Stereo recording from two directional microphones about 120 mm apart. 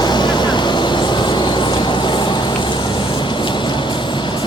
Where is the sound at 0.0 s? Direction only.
40° left (ahead or behind).